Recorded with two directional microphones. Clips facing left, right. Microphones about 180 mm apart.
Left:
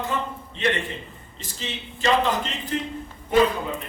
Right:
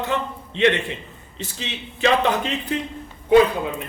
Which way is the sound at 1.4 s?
65° right (ahead or behind).